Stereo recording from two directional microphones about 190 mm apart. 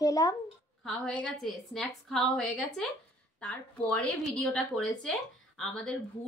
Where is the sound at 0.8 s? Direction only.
5° left (ahead or behind).